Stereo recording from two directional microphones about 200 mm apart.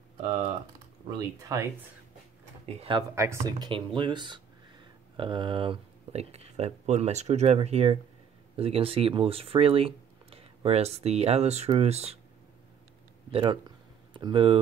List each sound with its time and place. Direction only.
1.5 s speech: 15° right (ahead or behind)
2.8 s speech: 25° right (ahead or behind)
13.3 s a sound: 25° right (ahead or behind)